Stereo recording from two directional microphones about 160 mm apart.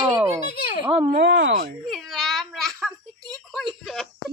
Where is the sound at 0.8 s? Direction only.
35° right (ahead or behind).